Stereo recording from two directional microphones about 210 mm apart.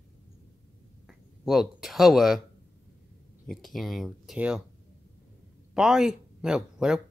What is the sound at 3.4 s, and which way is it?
Speech, centre (ahead or behind).